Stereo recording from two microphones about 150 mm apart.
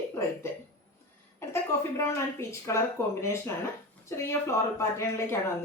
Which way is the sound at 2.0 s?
20° left (ahead or behind).